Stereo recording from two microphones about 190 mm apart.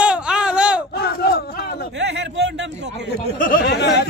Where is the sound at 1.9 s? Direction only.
65° right (ahead or behind).